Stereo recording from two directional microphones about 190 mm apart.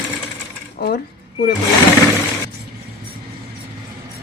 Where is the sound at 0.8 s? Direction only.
55° left (ahead or behind).